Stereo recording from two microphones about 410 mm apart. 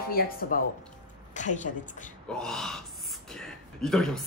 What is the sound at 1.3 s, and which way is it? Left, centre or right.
Speech, centre.